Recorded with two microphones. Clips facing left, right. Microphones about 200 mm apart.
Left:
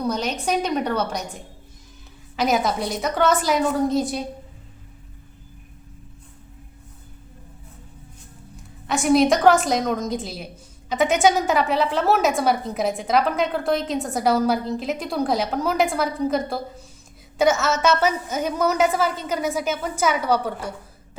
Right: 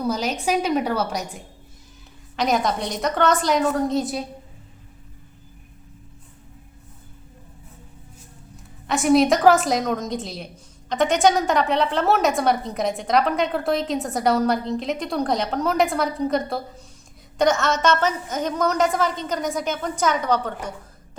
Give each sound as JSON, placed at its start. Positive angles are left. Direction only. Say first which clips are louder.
{"t": 0.0, "sound": "a woman's voice", "louder": "right 1 dB", "side_deg": -5}
{"t": 2.3, "sound": "a woman's voice", "louder": "even", "side_deg": 5}
{"t": 8.9, "sound": "a woman's voice", "louder": "even", "side_deg": 0}